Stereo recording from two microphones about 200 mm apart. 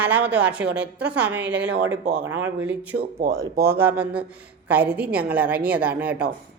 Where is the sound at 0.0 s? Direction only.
5° right (ahead or behind).